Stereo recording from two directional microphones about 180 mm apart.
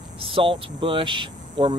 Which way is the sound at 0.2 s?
30° right (ahead or behind).